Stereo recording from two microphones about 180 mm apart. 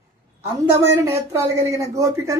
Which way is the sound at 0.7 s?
15° right (ahead or behind).